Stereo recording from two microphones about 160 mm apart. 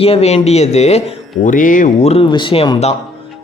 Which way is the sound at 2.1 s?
30° left (ahead or behind).